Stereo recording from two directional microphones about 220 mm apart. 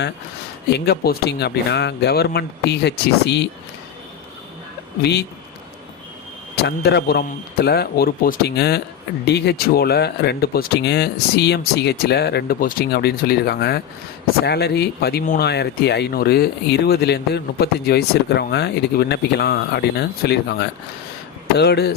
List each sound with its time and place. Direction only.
0.7 s speech: 45° left (ahead or behind)
6.6 s speech: 50° left (ahead or behind)